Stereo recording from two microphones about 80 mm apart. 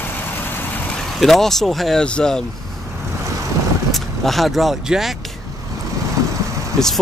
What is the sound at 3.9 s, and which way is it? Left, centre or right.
Speech, centre.